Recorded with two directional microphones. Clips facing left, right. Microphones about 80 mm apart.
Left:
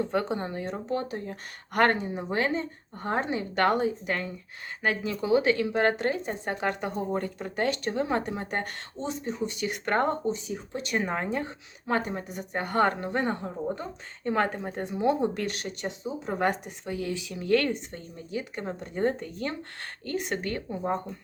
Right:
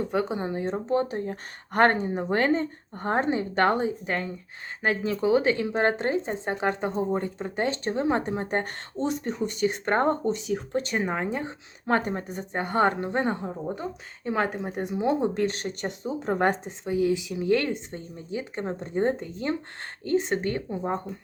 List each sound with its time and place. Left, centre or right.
0.0 s speech: centre
0.6 s speech: right
9.0 s speech: right
9.6 s speech: right
10.3 s speech: right
10.9 s speech: centre
11.9 s speech: right
12.5 s speech: right
14.3 s speech: centre; by 15.7 s right
15.8 s speech: right
16.6 s speech: centre